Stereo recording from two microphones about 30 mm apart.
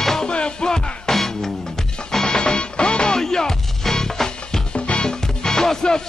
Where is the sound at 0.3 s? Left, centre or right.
Left.